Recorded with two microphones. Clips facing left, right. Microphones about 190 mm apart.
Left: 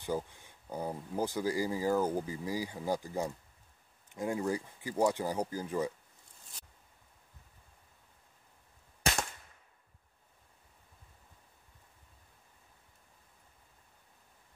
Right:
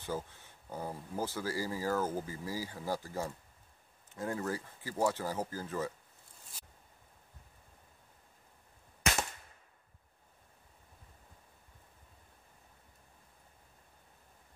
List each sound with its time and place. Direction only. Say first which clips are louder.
0.0 s speech: left 3 dB; 15° left (ahead or behind)